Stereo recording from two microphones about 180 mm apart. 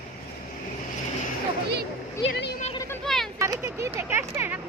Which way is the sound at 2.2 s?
70° left (ahead or behind).